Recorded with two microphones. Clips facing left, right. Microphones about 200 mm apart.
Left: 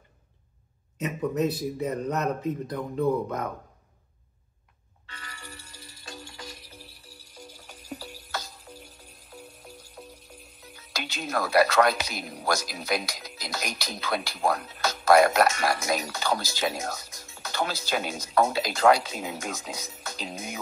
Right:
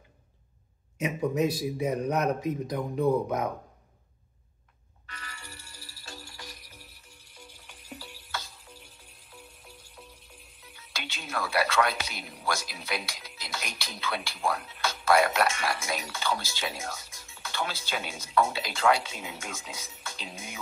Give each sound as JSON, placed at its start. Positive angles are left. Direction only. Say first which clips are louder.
{"t": 0.9, "sound": "speech", "louder": "even", "side_deg": -10}
{"t": 5.5, "sound": "music", "louder": "left 3 dB", "side_deg": 20}